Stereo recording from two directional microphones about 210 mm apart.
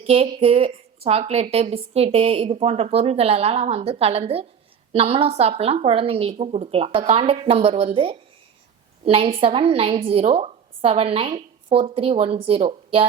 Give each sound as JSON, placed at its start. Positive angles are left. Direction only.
{"t": 0.0, "sound": "a woman's voice", "side_deg": -30}